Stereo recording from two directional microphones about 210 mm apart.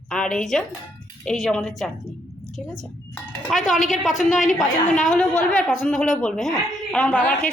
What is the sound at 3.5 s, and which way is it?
Speech, 35° left (ahead or behind).